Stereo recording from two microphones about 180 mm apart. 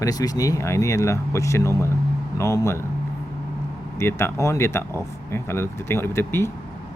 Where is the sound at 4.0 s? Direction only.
15° left (ahead or behind).